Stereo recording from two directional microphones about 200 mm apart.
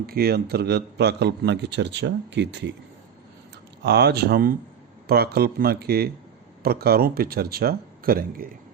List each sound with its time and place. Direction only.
0.0 s a man's voice: 50° right (ahead or behind)
3.8 s speech: 55° right (ahead or behind)